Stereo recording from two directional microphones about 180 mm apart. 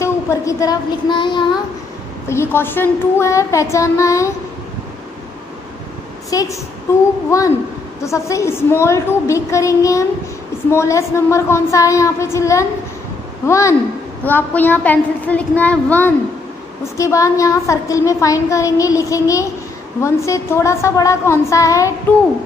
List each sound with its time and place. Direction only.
0.0 s a sound: 15° left (ahead or behind)
2.2 s a woman's voice: 15° left (ahead or behind)
6.3 s a woman's voice: 20° left (ahead or behind)